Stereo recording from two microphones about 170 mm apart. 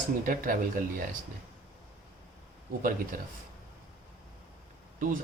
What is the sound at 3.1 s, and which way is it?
Speech, 55° right (ahead or behind).